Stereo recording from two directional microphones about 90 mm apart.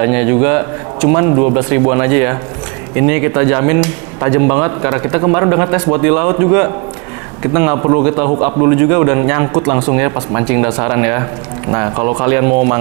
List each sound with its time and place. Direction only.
0.0 s a man's voice: 20° right (ahead or behind)
6.0 s a man's voice: 15° right (ahead or behind)